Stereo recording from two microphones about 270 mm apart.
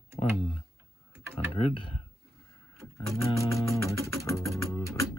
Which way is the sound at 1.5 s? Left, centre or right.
Centre.